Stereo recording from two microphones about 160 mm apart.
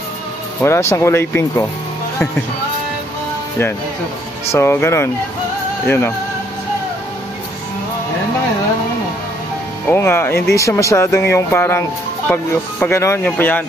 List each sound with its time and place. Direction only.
0.6 s speech: 15° left (ahead or behind)
4.5 s speech: 15° left (ahead or behind)
9.8 s speech: 15° left (ahead or behind)